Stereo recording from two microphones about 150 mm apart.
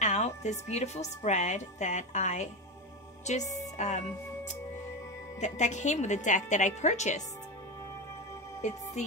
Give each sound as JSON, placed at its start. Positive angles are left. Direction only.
{"t": 0.0, "sound": "a woman's voice", "side_deg": 50}
{"t": 5.4, "sound": "a woman's voice", "side_deg": 50}